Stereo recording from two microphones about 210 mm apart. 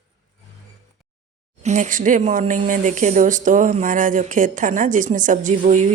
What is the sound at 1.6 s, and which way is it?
Speech, 35° right (ahead or behind).